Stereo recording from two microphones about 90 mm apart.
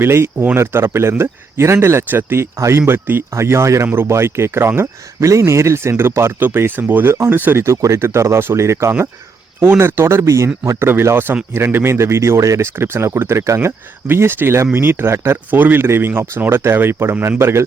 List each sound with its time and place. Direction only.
0.0 s speech: 25° right (ahead or behind)